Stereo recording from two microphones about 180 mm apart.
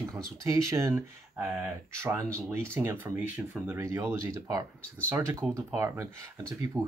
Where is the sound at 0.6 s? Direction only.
15° right (ahead or behind).